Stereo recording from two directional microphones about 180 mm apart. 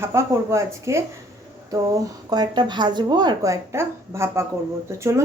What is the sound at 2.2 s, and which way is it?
Speech, 25° right (ahead or behind).